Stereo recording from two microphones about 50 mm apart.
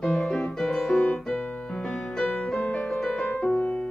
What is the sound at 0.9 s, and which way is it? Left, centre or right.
Music, centre.